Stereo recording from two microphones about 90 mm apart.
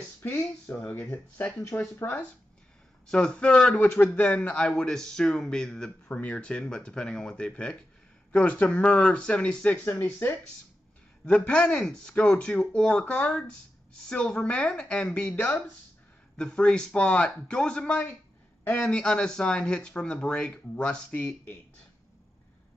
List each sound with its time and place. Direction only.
0.2 s speech: 20° left (ahead or behind)
3.1 s speech: 10° left (ahead or behind)
18.6 s speech: 20° left (ahead or behind)
18.9 s speech: 10° left (ahead or behind)